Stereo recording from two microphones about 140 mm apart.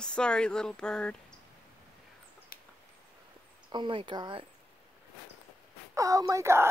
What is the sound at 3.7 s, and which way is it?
Speech, 35° right (ahead or behind).